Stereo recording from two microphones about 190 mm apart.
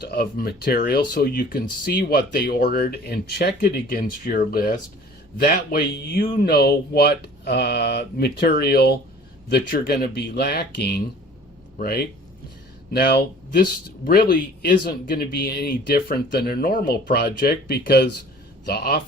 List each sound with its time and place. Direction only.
0.0 s speech: 55° left (ahead or behind)
6.0 s speech: 55° left (ahead or behind)